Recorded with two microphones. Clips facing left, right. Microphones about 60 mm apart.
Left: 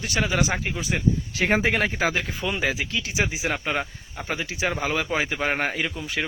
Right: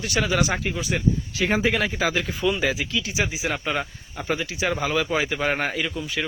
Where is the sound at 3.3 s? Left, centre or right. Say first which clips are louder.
Even; left.